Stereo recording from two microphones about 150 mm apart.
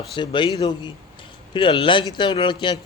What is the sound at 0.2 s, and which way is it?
Speech, 35° left (ahead or behind).